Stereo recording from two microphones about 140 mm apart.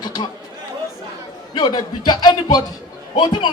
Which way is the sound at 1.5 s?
30° left (ahead or behind).